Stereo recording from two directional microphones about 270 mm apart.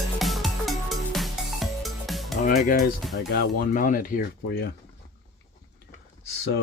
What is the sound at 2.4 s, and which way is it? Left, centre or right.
Speech, left.